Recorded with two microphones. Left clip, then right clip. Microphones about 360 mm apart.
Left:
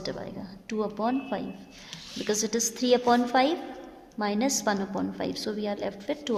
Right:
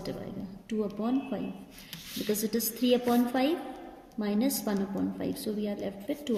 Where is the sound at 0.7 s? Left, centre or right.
Centre.